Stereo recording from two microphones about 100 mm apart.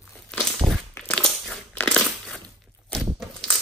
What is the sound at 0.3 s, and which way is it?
Crumpling, 10° left (ahead or behind).